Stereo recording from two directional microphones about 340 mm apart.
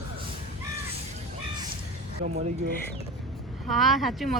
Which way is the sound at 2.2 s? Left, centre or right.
Right.